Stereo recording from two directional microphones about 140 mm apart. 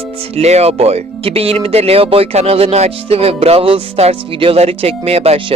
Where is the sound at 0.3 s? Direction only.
50° right (ahead or behind).